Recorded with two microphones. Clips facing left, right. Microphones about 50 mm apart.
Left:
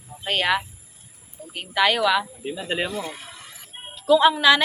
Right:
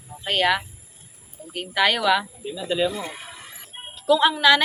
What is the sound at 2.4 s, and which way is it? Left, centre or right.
Speech, left.